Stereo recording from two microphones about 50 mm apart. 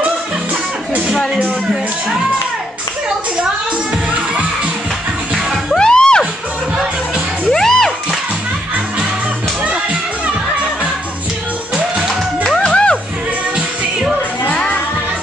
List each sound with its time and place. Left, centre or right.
5.3 s music: centre
5.8 s music: centre
7.5 s music: centre
12.4 s music: centre
14.5 s music: left